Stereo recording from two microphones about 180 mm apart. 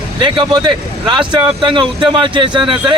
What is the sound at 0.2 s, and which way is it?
A man's voice, 25° right (ahead or behind).